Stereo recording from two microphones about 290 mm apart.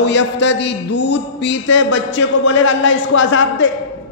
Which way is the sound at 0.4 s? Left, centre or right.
Left.